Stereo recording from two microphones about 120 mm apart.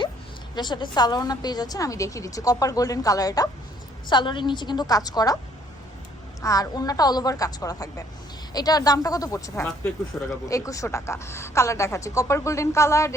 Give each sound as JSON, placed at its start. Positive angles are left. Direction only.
{"t": 0.5, "sound": "a woman's voice", "side_deg": 40}
{"t": 6.4, "sound": "a woman's voice", "side_deg": 30}
{"t": 10.1, "sound": "speech", "side_deg": 5}
{"t": 10.5, "sound": "a woman's voice", "side_deg": 25}